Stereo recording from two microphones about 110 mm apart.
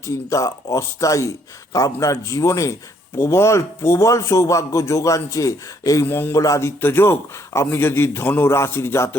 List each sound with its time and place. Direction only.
0.3 s a man's voice: 30° left (ahead or behind)